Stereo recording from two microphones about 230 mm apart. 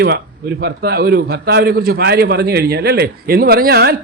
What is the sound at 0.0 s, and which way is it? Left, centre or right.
A man's voice, right.